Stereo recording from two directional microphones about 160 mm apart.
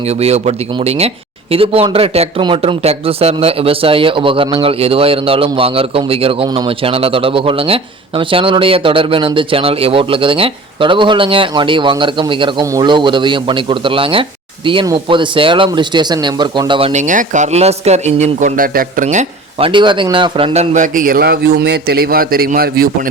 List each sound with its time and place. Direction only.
0.2 s speech: 40° right (ahead or behind)
16.9 s a man's voice: 50° right (ahead or behind)
19.0 s a man's voice: 40° right (ahead or behind); by 22.9 s 70° right (ahead or behind)